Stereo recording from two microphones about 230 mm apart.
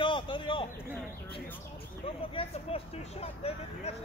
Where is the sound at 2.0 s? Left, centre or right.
Left.